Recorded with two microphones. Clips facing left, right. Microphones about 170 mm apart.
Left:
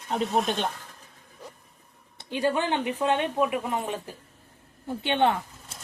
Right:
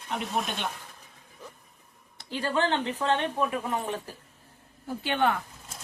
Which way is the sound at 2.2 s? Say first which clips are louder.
Left 2 dB; 20° left (ahead or behind).